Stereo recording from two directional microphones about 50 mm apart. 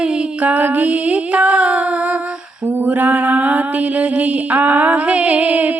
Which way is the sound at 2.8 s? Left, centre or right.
Right.